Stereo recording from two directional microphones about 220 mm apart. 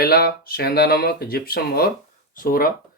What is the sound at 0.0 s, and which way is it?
Speech, 45° left (ahead or behind).